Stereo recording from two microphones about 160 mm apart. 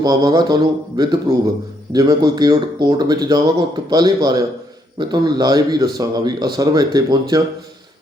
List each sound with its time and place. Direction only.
0.0 s speech: 25° right (ahead or behind)